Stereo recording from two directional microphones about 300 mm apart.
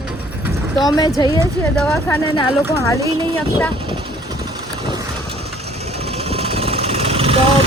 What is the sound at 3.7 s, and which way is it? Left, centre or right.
Vehicle, centre.